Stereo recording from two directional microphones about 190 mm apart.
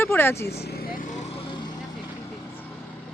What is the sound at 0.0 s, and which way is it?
Vehicle, 10° left (ahead or behind).